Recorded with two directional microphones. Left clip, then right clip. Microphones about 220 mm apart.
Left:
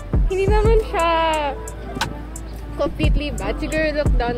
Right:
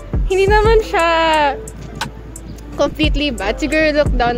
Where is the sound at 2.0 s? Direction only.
Centre (ahead or behind).